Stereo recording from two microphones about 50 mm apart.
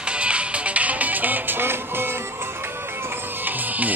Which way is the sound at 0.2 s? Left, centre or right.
Right.